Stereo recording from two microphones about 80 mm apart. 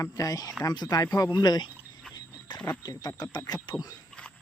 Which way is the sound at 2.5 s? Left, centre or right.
Left.